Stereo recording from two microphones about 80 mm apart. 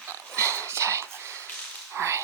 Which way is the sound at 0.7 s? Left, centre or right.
Right.